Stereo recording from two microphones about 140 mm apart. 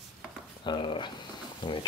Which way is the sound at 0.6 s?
35° left (ahead or behind).